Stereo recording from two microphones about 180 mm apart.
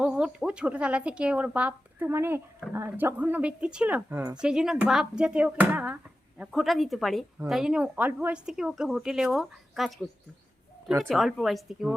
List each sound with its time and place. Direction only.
0.0 s a woman's voice: 5° right (ahead or behind)
11.1 s a woman's voice: centre (ahead or behind)